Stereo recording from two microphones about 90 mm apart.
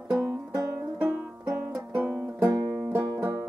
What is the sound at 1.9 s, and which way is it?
Music, 20° right (ahead or behind).